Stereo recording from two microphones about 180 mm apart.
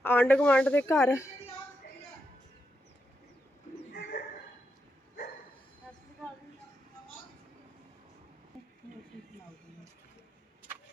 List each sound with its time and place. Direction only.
0.0 s speech: 10° left (ahead or behind)
3.9 s bird: 60° left (ahead or behind)